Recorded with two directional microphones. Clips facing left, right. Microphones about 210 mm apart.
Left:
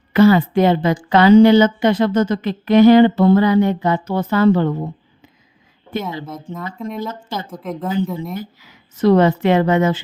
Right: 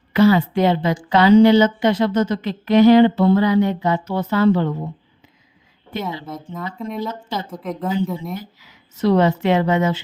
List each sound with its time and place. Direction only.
0.1 s a woman's voice: 50° left (ahead or behind)
6.2 s a woman's voice: centre (ahead or behind)
8.4 s a woman's voice: 50° left (ahead or behind)